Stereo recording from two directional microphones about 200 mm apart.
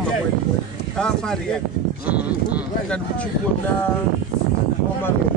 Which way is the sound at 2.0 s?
5° right (ahead or behind).